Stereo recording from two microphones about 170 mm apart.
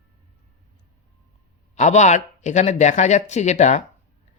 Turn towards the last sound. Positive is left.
turn(degrees=45)  # may be behind; listen again after turning